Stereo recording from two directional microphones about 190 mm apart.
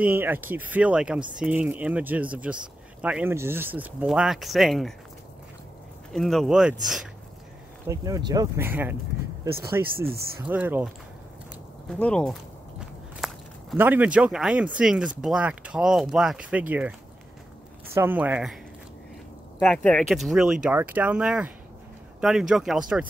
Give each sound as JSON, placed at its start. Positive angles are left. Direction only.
{"t": 0.0, "sound": "speech", "side_deg": -10}
{"t": 6.1, "sound": "speech", "side_deg": 0}
{"t": 7.9, "sound": "speech", "side_deg": -20}
{"t": 11.9, "sound": "speech", "side_deg": 5}
{"t": 13.2, "sound": "walk", "side_deg": 0}
{"t": 13.7, "sound": "speech", "side_deg": -10}
{"t": 17.9, "sound": "speech", "side_deg": -10}
{"t": 19.6, "sound": "speech", "side_deg": 5}